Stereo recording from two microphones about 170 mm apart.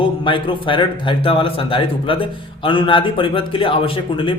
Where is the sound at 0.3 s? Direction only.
30° left (ahead or behind).